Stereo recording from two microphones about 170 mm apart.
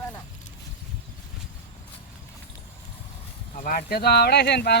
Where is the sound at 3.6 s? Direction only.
60° left (ahead or behind); by 4.7 s 80° left.